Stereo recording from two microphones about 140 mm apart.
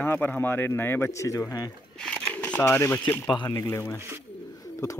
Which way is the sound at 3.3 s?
25° left (ahead or behind).